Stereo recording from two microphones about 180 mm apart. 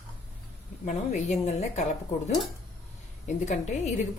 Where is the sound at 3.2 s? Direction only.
40° left (ahead or behind).